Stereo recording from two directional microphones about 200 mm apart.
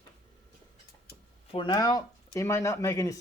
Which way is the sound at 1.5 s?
20° left (ahead or behind).